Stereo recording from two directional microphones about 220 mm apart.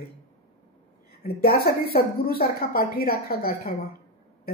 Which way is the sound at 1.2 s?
45° left (ahead or behind).